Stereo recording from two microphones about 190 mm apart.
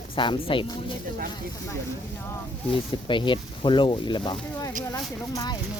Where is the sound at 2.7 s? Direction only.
25° left (ahead or behind).